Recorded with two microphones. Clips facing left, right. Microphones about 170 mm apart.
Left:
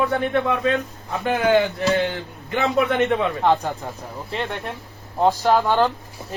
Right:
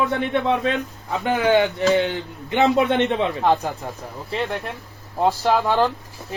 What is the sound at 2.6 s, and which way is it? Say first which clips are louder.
Speech: right 3 dB; 30° right (ahead or behind).